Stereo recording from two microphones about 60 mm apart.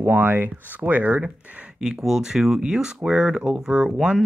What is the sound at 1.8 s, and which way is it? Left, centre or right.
Speech, centre.